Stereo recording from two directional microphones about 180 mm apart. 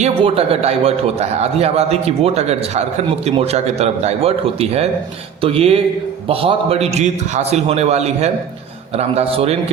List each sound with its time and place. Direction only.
0.0 s a man's voice: 35° right (ahead or behind)